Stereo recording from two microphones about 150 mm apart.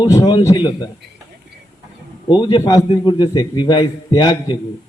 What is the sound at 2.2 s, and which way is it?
A man's voice, 30° left (ahead or behind).